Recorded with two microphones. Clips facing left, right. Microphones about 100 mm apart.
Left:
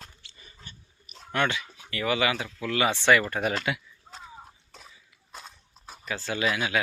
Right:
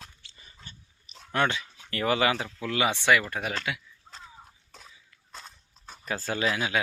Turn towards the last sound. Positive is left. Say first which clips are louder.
# left 1 dB
turn(degrees=-25)  # may be behind; listen again after turning